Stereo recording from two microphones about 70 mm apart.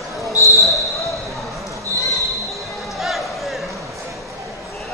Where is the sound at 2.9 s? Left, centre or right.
Centre.